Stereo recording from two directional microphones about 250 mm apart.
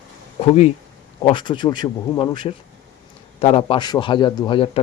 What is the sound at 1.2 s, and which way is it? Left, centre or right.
A man's voice, centre.